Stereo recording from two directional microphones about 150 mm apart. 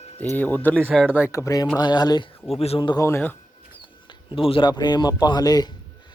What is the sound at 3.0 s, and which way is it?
Speech, 15° left (ahead or behind).